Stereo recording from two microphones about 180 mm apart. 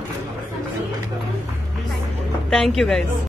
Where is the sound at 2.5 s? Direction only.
Centre (ahead or behind).